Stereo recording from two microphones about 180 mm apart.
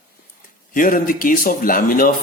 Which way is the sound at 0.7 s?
50° left (ahead or behind).